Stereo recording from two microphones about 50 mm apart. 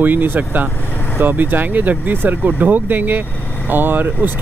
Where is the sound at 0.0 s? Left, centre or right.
Right.